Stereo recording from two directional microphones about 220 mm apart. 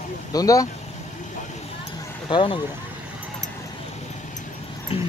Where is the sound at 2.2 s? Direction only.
20° left (ahead or behind).